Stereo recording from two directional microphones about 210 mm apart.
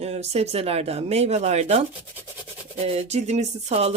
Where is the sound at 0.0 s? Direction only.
30° right (ahead or behind).